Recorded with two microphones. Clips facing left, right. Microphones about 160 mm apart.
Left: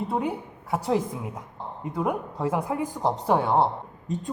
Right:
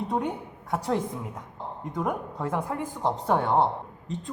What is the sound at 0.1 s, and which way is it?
A woman's voice, 5° left (ahead or behind).